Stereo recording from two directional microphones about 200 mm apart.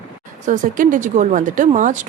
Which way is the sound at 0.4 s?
40° right (ahead or behind).